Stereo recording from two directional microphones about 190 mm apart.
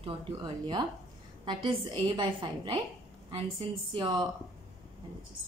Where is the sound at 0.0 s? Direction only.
20° right (ahead or behind).